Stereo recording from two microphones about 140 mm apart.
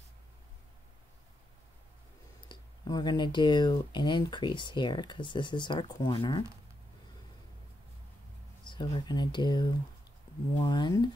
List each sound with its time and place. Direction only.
2.4 s speech: 30° left (ahead or behind)
8.6 s speech: 30° left (ahead or behind)